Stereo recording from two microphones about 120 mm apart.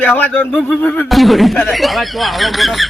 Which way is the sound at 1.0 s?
Centre (ahead or behind).